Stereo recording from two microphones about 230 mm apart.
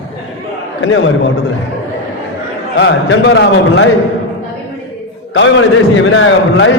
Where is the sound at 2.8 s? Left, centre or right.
Left.